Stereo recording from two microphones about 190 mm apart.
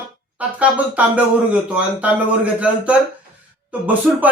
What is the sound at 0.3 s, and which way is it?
Speech, 5° right (ahead or behind).